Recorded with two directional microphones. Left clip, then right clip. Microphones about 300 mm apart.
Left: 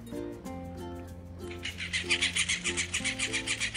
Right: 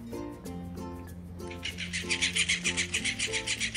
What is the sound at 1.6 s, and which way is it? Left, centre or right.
Music, centre.